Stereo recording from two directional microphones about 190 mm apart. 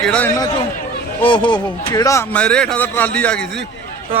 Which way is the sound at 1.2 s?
25° left (ahead or behind).